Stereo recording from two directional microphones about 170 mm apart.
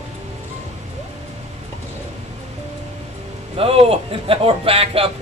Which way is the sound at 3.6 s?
35° right (ahead or behind).